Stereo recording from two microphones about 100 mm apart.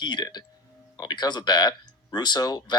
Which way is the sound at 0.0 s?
45° left (ahead or behind).